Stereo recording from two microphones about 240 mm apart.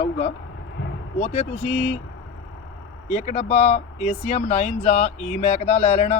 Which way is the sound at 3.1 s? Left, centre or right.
Left.